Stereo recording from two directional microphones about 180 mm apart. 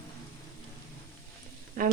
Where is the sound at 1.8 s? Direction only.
50° right (ahead or behind).